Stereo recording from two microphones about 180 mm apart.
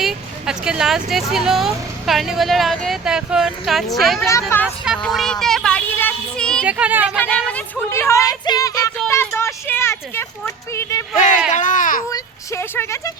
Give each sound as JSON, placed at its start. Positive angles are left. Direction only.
{"t": 0.0, "sound": "speech", "side_deg": -5}
{"t": 4.3, "sound": "speech", "side_deg": 15}
{"t": 4.9, "sound": "a sound", "side_deg": 0}
{"t": 6.7, "sound": "speech", "side_deg": -5}
{"t": 7.2, "sound": "speech", "side_deg": 10}
{"t": 9.0, "sound": "a sound", "side_deg": 15}
{"t": 11.5, "sound": "a child's voice", "side_deg": 45}
{"t": 12.1, "sound": "speech", "side_deg": 15}